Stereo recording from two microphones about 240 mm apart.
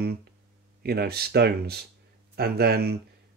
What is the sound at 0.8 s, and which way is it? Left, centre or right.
Speech, right.